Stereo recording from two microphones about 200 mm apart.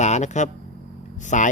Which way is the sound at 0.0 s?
35° left (ahead or behind).